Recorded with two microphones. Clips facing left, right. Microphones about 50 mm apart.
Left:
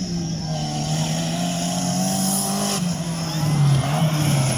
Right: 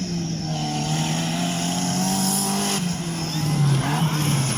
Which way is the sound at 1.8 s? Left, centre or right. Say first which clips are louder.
Left 1 dB; centre.